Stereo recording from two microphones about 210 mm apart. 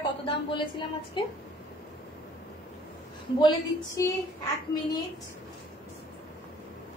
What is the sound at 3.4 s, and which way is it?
Speech, 20° left (ahead or behind).